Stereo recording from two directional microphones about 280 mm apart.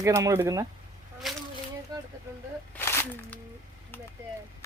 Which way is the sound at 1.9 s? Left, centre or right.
Centre.